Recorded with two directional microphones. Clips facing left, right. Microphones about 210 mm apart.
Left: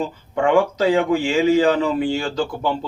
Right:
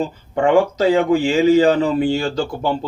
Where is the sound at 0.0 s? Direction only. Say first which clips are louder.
Right 2 dB; 40° right (ahead or behind).